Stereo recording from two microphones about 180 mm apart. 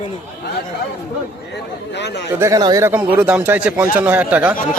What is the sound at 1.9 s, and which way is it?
Speech, 75° left (ahead or behind).